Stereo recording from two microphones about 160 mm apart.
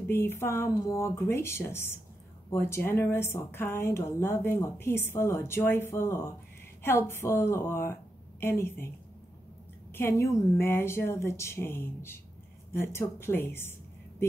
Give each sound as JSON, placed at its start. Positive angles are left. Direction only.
{"t": 0.0, "sound": "a woman's voice", "side_deg": 15}
{"t": 9.9, "sound": "speech", "side_deg": 15}